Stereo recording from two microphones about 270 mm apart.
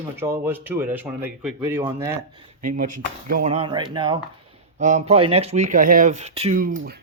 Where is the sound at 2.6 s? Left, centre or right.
Right.